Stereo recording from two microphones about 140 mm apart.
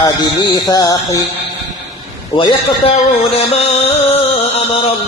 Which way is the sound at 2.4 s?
35° left (ahead or behind).